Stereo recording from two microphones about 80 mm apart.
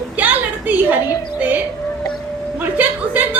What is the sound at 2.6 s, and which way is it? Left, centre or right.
Speech, right.